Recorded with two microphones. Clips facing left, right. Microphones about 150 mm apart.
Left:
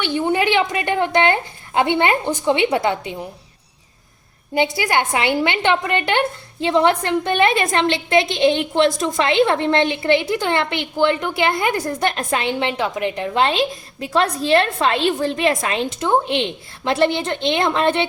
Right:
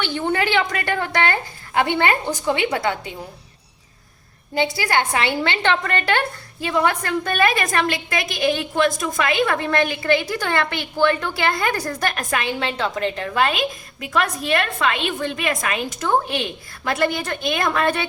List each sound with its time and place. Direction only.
0.0 s a woman's voice: 15° left (ahead or behind)
4.5 s a woman's voice: 20° left (ahead or behind)